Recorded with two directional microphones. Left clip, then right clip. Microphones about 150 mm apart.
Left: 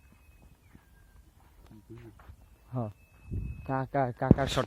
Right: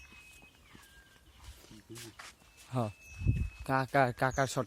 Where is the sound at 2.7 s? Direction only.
35° right (ahead or behind).